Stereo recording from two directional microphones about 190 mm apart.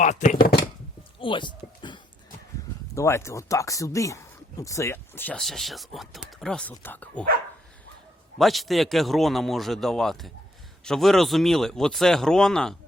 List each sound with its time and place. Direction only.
0.0 s speech: 40° left (ahead or behind)
1.2 s a sound: 25° left (ahead or behind)
2.9 s speech: 15° left (ahead or behind)
8.4 s a man's voice: centre (ahead or behind)